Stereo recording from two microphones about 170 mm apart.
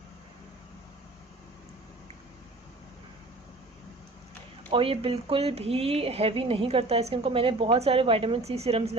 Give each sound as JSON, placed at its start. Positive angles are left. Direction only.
{"t": 4.7, "sound": "speech", "side_deg": -30}